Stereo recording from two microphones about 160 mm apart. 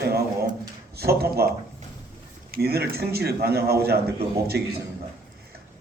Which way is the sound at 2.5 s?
80° right.